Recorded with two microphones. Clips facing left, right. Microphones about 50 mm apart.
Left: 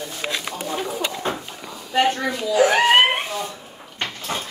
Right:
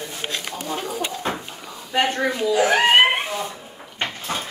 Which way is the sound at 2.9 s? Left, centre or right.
Centre.